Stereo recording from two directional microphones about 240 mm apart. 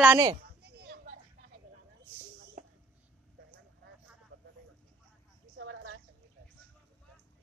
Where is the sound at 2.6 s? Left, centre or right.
Right.